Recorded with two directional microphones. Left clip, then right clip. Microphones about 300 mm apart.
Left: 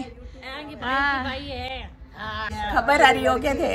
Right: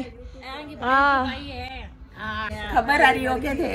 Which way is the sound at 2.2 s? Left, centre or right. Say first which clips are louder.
Right 1 dB; left.